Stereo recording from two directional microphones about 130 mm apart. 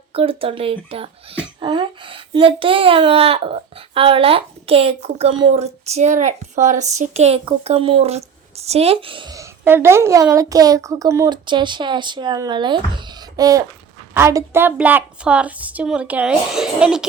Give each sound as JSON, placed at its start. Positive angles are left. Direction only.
{"t": 0.1, "sound": "speech", "side_deg": -45}
{"t": 9.3, "sound": "a woman's voice", "side_deg": -20}
{"t": 11.4, "sound": "a woman's voice", "side_deg": -35}